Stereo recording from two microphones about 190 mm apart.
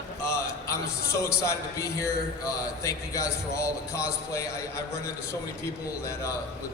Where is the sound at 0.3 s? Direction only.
15° left (ahead or behind).